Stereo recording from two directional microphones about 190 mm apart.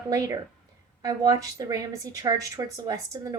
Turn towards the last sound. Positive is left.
turn(degrees=-20)  # may be behind; listen again after turning